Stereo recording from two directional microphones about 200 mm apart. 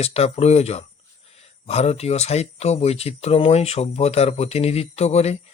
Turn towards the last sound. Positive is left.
turn(degrees=35)  # may be behind; listen again after turning